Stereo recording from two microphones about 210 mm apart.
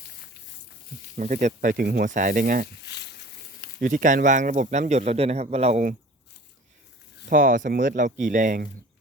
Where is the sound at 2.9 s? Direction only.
55° left (ahead or behind).